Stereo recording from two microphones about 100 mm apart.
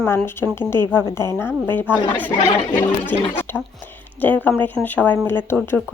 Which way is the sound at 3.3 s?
20° left (ahead or behind).